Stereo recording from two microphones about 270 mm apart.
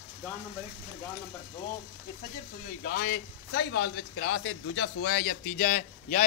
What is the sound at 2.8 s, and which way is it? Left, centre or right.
Speech, left.